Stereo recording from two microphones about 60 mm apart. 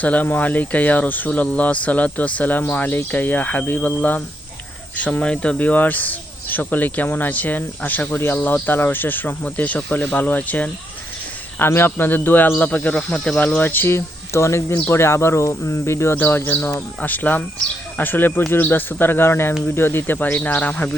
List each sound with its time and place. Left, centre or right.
0.0 s speech: left
11.9 s speech: left
13.1 s speech: centre
13.6 s speech: left
16.1 s speech: left